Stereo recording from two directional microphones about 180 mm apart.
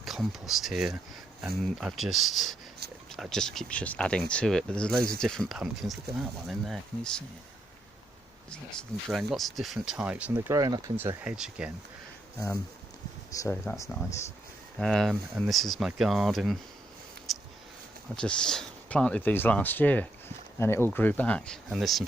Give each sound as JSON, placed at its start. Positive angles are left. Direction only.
{"t": 0.0, "sound": "speech", "side_deg": 0}
{"t": 8.4, "sound": "speech", "side_deg": 5}
{"t": 10.3, "sound": "speech", "side_deg": -20}
{"t": 13.3, "sound": "speech", "side_deg": 15}
{"t": 14.8, "sound": "speech", "side_deg": 0}
{"t": 17.3, "sound": "a sound", "side_deg": 0}
{"t": 18.2, "sound": "speech", "side_deg": 5}